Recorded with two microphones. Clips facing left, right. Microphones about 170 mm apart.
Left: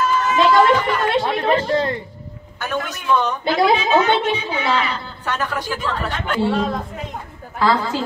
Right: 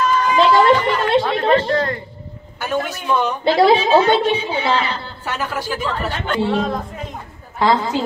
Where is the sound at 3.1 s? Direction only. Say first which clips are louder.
Left 1 dB; 10° right (ahead or behind).